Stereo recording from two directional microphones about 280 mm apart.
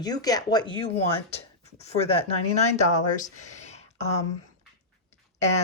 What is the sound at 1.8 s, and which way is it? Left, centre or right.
Speech, left.